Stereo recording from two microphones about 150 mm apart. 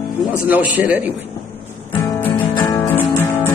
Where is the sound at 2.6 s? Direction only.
25° left (ahead or behind).